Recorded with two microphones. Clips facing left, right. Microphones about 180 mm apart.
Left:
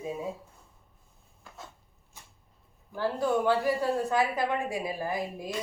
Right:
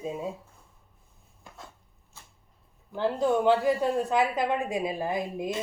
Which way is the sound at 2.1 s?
15° left (ahead or behind).